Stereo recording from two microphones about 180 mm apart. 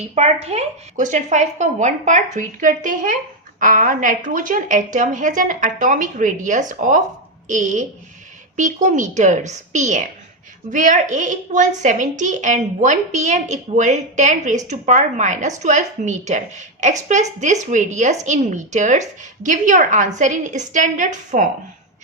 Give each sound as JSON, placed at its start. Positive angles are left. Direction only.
{"t": 0.1, "sound": "a woman's voice", "side_deg": -35}